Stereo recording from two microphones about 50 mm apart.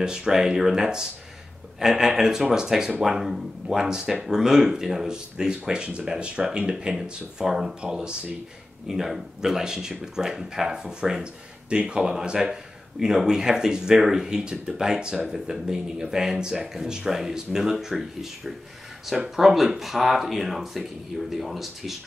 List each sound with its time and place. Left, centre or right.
0.0 s speech: centre